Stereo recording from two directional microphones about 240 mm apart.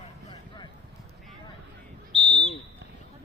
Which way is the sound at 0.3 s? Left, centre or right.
Centre.